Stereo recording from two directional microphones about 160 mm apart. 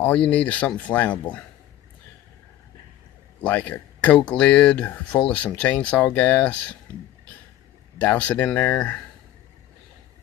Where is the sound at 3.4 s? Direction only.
10° left (ahead or behind).